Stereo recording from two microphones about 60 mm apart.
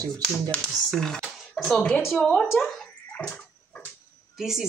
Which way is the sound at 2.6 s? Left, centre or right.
Centre.